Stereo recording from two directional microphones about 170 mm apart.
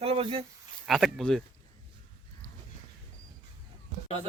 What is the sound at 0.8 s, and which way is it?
Speech, centre (ahead or behind).